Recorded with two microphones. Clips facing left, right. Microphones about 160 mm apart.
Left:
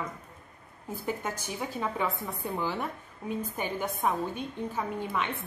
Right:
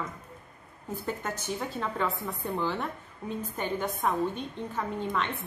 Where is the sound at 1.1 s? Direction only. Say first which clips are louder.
Even; 10° left (ahead or behind).